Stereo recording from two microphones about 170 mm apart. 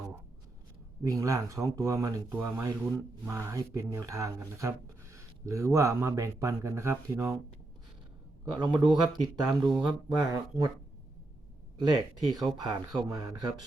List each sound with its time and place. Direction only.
1.0 s speech: 20° right (ahead or behind)
8.5 s speech: 25° right (ahead or behind)
11.9 s speech: 25° right (ahead or behind)